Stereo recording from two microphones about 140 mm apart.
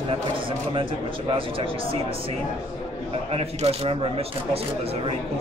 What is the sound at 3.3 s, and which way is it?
Speech, 45° right (ahead or behind).